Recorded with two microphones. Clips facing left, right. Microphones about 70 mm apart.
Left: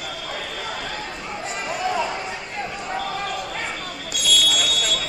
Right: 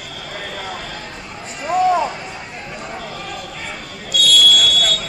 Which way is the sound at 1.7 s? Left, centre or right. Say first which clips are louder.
Right 9 dB; right.